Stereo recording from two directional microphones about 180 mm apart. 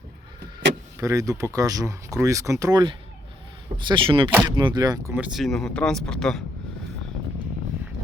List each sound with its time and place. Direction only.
0.9 s speech: 20° right (ahead or behind)
5.1 s speech: 5° right (ahead or behind)